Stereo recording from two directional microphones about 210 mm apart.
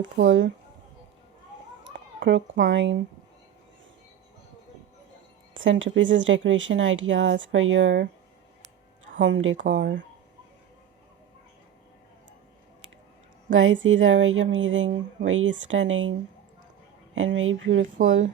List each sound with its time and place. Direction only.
0.0 s speech: 60° right (ahead or behind)
2.2 s speech: 60° right (ahead or behind)
5.5 s speech: 65° right (ahead or behind)
9.1 s speech: 60° right (ahead or behind)
13.5 s speech: 65° right (ahead or behind)
17.2 s speech: 65° right (ahead or behind)